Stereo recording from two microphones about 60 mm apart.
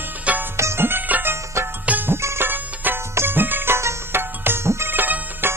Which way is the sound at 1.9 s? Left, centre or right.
Right.